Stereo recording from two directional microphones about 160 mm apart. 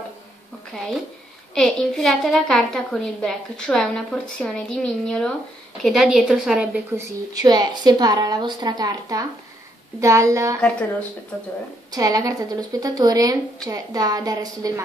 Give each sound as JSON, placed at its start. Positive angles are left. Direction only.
{"t": 1.5, "sound": "a woman's voice", "side_deg": 5}
{"t": 7.3, "sound": "a woman's voice", "side_deg": -25}
{"t": 11.9, "sound": "a woman's voice", "side_deg": -20}